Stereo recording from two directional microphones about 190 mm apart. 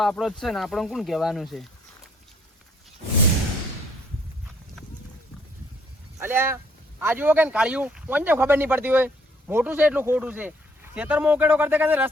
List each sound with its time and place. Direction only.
0.0 s speech: centre (ahead or behind)
6.1 s speech: 10° right (ahead or behind)